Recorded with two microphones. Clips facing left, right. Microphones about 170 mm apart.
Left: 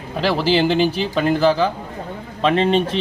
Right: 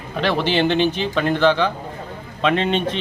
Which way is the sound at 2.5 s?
40° left (ahead or behind).